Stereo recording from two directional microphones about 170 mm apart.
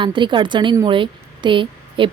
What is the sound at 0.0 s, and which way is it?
A woman's voice, 30° right (ahead or behind).